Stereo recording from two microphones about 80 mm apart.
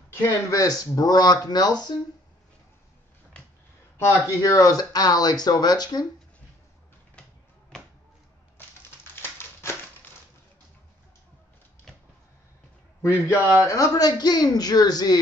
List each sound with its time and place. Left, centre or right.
0.2 s speech: left
4.3 s speech: left
7.2 s a sound: centre
9.1 s a sound: left
13.1 s speech: right
13.7 s speech: left